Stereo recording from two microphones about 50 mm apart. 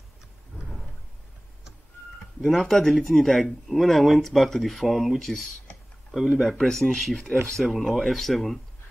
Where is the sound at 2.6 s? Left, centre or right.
Centre.